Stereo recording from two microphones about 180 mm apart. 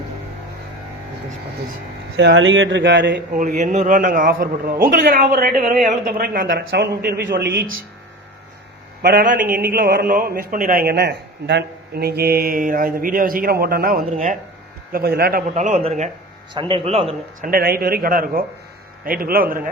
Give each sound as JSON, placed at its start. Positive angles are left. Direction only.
{"t": 2.1, "sound": "speech", "side_deg": -85}
{"t": 3.3, "sound": "speech", "side_deg": -45}
{"t": 6.5, "sound": "speech", "side_deg": -75}
{"t": 9.0, "sound": "a man's voice", "side_deg": -55}
{"t": 14.9, "sound": "a man's voice", "side_deg": -60}
{"t": 15.5, "sound": "speech", "side_deg": -40}
{"t": 17.4, "sound": "a man's voice", "side_deg": -55}